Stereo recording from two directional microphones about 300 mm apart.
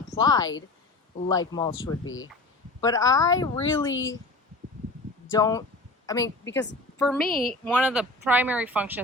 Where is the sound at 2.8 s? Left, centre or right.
Centre.